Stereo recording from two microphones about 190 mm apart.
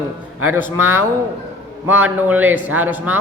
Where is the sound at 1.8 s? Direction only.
10° right (ahead or behind).